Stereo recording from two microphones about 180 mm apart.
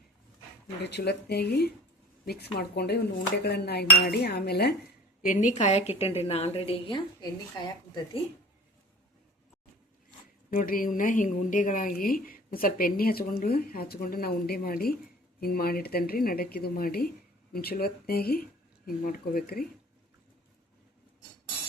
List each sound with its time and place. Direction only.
0.8 s a woman's voice: 70° left (ahead or behind)
5.2 s a woman's voice: 45° left (ahead or behind); by 8.2 s 25° left (ahead or behind)
10.5 s a woman's voice: 50° left (ahead or behind)